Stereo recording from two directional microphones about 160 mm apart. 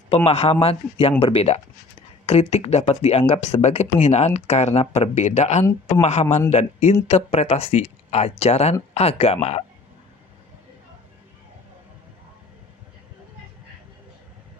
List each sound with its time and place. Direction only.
0.3 s speech: 40° left (ahead or behind)